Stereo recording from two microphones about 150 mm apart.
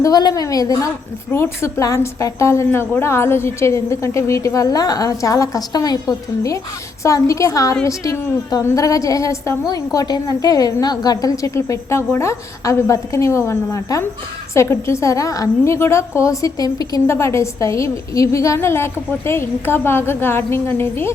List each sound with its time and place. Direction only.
0.0 s a woman's voice: 25° left (ahead or behind)